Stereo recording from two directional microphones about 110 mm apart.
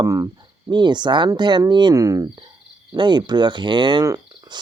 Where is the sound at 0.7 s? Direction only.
45° right (ahead or behind).